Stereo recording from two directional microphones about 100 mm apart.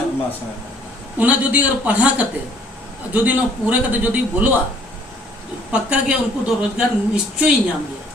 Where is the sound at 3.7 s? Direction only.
15° right (ahead or behind).